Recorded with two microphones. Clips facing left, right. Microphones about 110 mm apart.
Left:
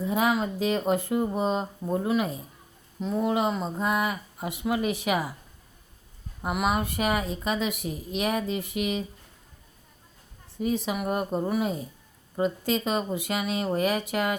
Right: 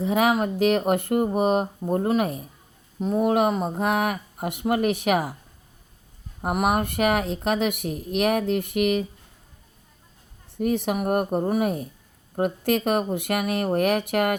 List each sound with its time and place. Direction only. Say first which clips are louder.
0.0 s speech: right 4 dB; 65° right (ahead or behind)
1.9 s speech: right 3 dB; 50° right (ahead or behind)
6.4 s speech: right 4 dB; 55° right (ahead or behind)
10.6 s speech: right 4 dB; 60° right (ahead or behind)